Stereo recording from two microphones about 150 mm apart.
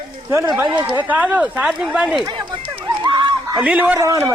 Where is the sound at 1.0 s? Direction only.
10° right (ahead or behind).